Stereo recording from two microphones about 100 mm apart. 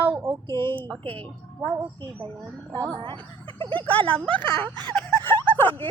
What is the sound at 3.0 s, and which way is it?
A woman's voice, 55° right (ahead or behind).